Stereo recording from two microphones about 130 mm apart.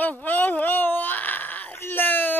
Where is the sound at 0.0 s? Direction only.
15° left (ahead or behind).